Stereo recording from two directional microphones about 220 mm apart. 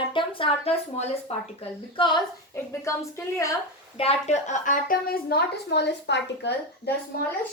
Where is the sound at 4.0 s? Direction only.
30° left (ahead or behind); by 6.9 s 50° left (ahead or behind).